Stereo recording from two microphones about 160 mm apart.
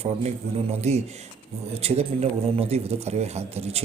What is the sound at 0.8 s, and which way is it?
A man's voice, 45° right (ahead or behind).